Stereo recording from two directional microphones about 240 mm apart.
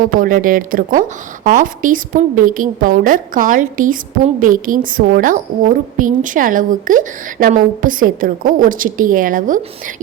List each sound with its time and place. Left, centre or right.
0.0 s a woman's voice: right